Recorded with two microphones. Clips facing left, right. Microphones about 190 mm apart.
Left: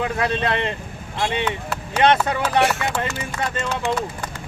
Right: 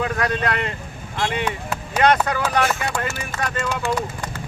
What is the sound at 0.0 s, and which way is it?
Speech, 25° left (ahead or behind).